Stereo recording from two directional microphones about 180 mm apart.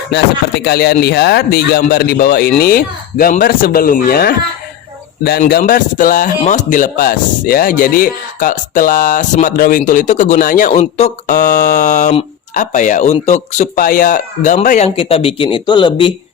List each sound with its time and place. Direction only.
0.6 s speech: 60° left (ahead or behind)
5.5 s speech: 55° left (ahead or behind)
14.9 s speech: 30° left (ahead or behind)